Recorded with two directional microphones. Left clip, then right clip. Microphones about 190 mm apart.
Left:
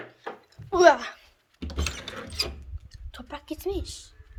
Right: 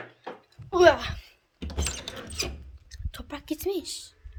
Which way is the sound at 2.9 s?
15° right (ahead or behind).